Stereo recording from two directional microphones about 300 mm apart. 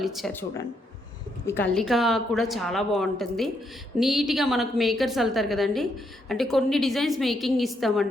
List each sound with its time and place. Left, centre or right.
0.0 s a woman's voice: centre